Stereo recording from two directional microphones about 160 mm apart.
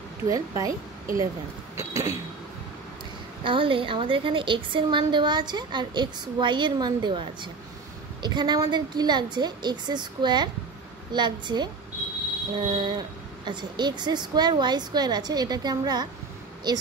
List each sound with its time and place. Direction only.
0.3 s a woman's voice: 20° right (ahead or behind)
1.8 s a sound: 20° right (ahead or behind)
3.4 s a woman's voice: 35° right (ahead or behind)